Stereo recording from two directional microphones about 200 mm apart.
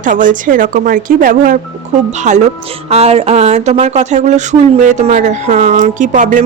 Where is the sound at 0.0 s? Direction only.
40° right (ahead or behind).